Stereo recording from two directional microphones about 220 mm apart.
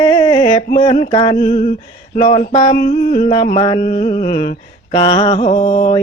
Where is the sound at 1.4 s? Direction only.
30° left (ahead or behind).